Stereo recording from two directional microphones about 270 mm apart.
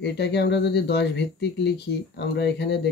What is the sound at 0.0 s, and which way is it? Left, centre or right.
Speech, left.